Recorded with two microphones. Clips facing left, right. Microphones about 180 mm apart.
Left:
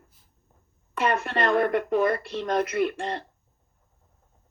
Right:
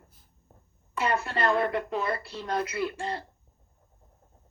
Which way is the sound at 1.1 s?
55° left (ahead or behind).